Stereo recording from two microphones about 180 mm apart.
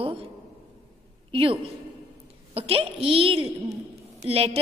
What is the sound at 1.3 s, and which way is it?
A woman's voice, 30° right (ahead or behind).